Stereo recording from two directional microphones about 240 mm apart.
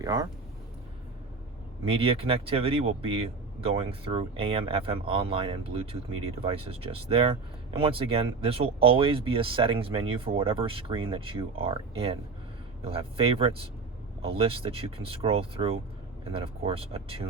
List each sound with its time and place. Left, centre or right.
0.0 s speech: centre
1.8 s speech: right